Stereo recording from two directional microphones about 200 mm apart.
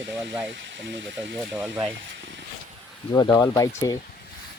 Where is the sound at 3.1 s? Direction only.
20° left (ahead or behind).